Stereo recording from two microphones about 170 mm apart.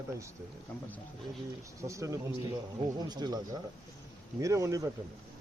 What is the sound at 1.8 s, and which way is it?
Speech, 20° right (ahead or behind).